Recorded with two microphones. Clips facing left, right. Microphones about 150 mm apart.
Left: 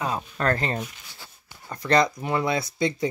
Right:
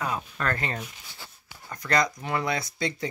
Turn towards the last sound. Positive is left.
turn(degrees=20)  # may be behind; listen again after turning